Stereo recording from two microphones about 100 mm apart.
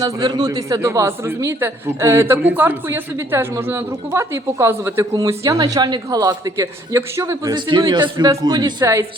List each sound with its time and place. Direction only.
0.0 s a man's voice: 40° right (ahead or behind)
7.5 s a man's voice: 50° right (ahead or behind)
8.8 s a man's voice: 25° right (ahead or behind)